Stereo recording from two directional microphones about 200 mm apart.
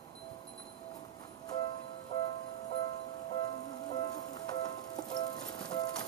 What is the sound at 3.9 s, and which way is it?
Music, 20° left (ahead or behind).